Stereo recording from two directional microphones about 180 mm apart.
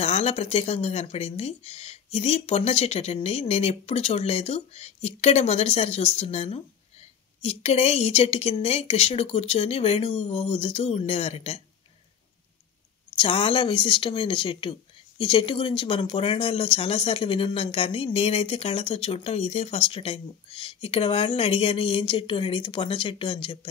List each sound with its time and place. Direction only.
0.0 s speech: 35° left (ahead or behind)
13.2 s speech: 30° left (ahead or behind)